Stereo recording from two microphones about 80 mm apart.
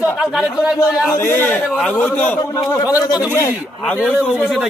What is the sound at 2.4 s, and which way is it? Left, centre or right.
A man's voice, left.